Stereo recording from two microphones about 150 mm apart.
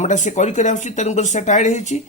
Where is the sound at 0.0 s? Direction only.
55° left (ahead or behind).